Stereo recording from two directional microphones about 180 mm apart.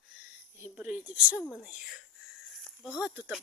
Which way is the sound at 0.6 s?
10° right (ahead or behind).